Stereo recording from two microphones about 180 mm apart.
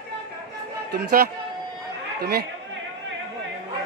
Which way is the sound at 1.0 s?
55° right (ahead or behind).